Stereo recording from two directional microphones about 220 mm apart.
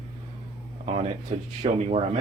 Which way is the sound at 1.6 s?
30° right (ahead or behind).